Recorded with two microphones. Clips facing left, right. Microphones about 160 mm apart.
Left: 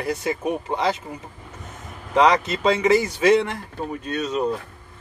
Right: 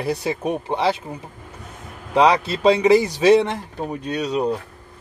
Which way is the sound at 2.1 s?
10° right (ahead or behind).